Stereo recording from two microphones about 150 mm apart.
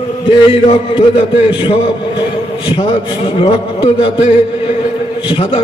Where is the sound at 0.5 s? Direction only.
40° left (ahead or behind).